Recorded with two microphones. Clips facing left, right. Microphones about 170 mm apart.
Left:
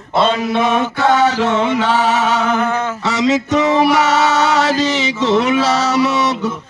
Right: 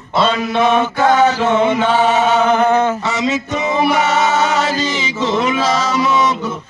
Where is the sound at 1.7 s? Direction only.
90° left.